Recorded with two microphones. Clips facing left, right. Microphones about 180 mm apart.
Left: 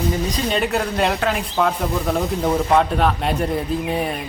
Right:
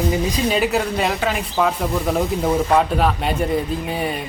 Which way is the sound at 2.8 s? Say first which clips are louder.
Even; centre (ahead or behind).